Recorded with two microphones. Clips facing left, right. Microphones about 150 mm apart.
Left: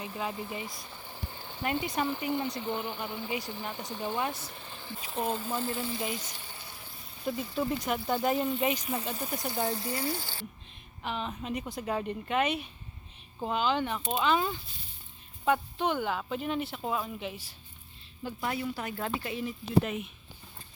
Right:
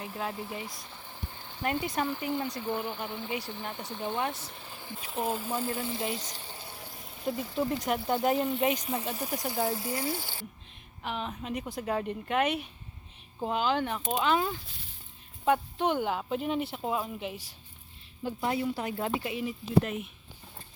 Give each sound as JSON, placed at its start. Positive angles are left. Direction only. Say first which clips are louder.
{"t": 0.0, "sound": "speech", "louder": "even", "side_deg": -5}
{"t": 2.6, "sound": "speech", "louder": "right 1 dB", "side_deg": -10}
{"t": 3.1, "sound": "speech", "louder": "even", "side_deg": 10}
{"t": 4.5, "sound": "speech", "louder": "even", "side_deg": -5}
{"t": 7.9, "sound": "speech", "louder": "right 3 dB", "side_deg": -5}
{"t": 9.1, "sound": "speech", "louder": "right 1 dB", "side_deg": 0}
{"t": 18.2, "sound": "speech", "louder": "right 3 dB", "side_deg": -20}
{"t": 19.8, "sound": "speech", "louder": "even", "side_deg": 0}